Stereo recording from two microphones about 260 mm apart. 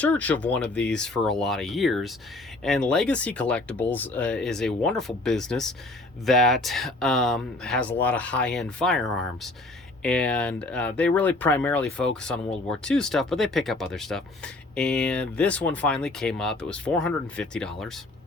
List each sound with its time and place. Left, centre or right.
0.0 s speech: centre